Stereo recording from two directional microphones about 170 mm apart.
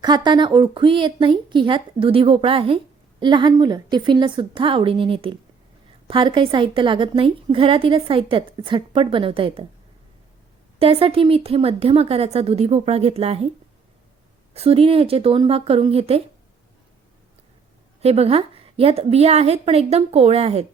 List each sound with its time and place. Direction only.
0.0 s a woman's voice: 25° right (ahead or behind)
10.8 s a woman's voice: 35° right (ahead or behind)
14.5 s a woman's voice: 35° right (ahead or behind)
18.0 s a woman's voice: 35° right (ahead or behind)